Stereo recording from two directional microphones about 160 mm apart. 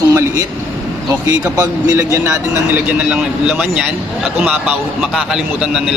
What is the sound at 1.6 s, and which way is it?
A man's voice, 20° right (ahead or behind).